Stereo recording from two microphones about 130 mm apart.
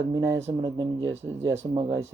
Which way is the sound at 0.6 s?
35° right (ahead or behind).